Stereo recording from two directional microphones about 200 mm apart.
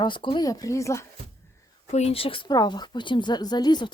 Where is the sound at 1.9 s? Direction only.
30° left (ahead or behind).